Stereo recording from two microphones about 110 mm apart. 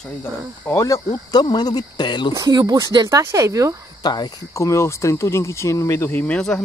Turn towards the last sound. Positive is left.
turn(degrees=5)  # may be behind; listen again after turning